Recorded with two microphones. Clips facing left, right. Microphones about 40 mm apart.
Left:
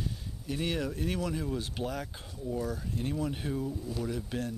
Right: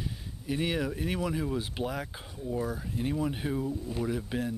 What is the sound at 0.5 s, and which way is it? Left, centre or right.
Speech, centre.